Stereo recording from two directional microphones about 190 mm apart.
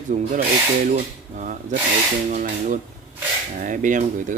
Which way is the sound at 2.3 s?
45° right (ahead or behind).